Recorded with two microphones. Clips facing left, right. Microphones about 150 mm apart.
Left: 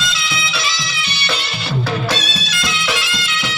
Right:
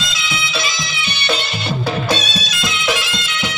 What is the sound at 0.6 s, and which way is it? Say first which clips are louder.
Music: right 1 dB; 20° right (ahead or behind).